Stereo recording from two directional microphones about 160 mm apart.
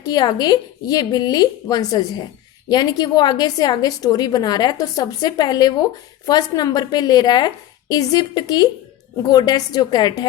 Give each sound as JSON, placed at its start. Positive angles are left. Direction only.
{"t": 0.0, "sound": "a woman's voice", "side_deg": 25}